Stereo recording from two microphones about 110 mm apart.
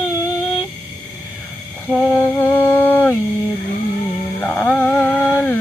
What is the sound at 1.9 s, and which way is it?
Mantra, 15° left (ahead or behind).